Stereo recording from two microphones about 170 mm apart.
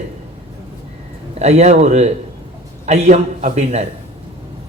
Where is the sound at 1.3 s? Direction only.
40° right (ahead or behind).